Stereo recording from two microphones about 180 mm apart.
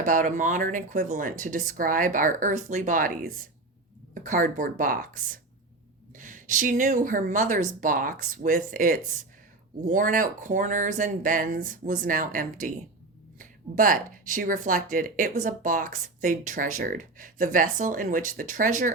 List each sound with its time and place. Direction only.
0.0 s speech: 45° right (ahead or behind)